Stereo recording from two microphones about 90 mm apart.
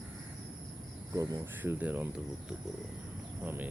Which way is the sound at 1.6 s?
20° right (ahead or behind).